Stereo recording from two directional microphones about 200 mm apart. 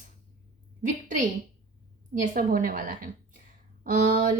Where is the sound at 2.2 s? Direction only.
40° right (ahead or behind).